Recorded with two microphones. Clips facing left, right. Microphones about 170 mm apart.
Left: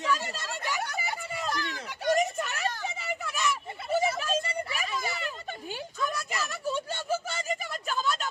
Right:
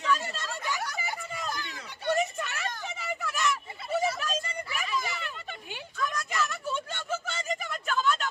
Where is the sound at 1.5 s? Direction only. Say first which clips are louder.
Left 5 dB; 80° left.